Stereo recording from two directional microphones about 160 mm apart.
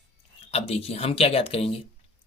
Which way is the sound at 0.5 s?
40° left (ahead or behind).